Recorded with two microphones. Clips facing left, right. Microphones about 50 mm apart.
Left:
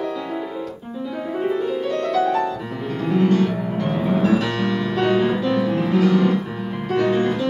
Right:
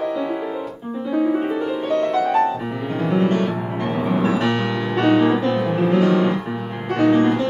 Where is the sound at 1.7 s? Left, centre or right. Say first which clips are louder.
Right 2 dB; right.